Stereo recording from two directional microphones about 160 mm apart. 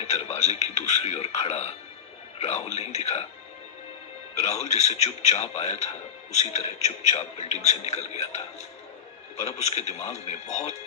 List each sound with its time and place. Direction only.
0.1 s radio: 40° left (ahead or behind)
1.4 s a man's voice: 40° left (ahead or behind)
4.4 s a man's voice: 45° left (ahead or behind)